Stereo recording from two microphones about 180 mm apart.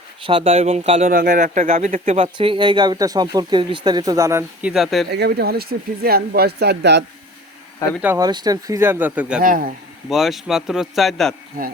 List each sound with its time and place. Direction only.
0.2 s a man's voice: 30° right (ahead or behind)
4.7 s speech: centre (ahead or behind)
5.1 s speech: 65° right (ahead or behind)
8.0 s speech: 15° right (ahead or behind)
9.4 s speech: 50° right (ahead or behind)
10.1 s speech: centre (ahead or behind)